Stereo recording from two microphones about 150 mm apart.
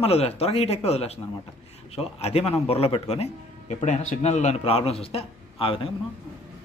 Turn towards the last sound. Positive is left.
turn(degrees=40)  # may be behind; listen again after turning